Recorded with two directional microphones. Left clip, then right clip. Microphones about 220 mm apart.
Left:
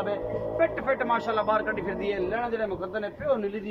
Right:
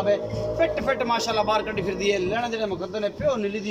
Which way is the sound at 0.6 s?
10° right (ahead or behind).